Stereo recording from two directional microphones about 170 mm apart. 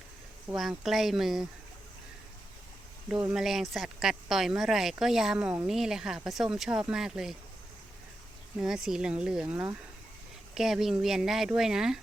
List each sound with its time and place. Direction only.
0.4 s speech: centre (ahead or behind)
3.1 s speech: 5° right (ahead or behind)
8.6 s speech: 5° right (ahead or behind)